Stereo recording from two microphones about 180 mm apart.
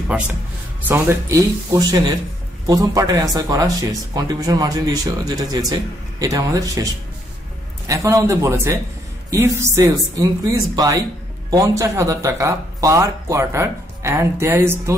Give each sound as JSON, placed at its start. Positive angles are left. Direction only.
{"t": 0.8, "sound": "speech", "side_deg": -10}